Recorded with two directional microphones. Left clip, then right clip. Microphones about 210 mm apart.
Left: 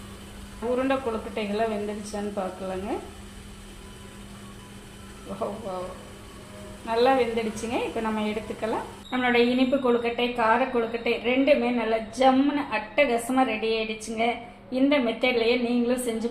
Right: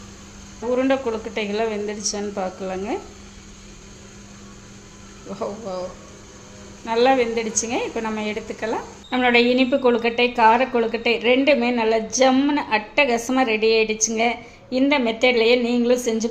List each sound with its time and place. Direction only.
1.4 s a woman's voice: 40° right (ahead or behind)
5.3 s a woman's voice: 40° right (ahead or behind)
6.8 s a woman's voice: 35° right (ahead or behind)
9.0 s a woman's voice: 55° right (ahead or behind)